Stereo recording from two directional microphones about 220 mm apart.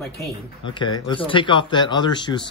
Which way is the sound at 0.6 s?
20° left (ahead or behind).